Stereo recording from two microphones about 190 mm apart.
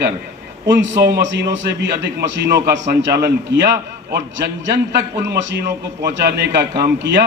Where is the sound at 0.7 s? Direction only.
70° right (ahead or behind).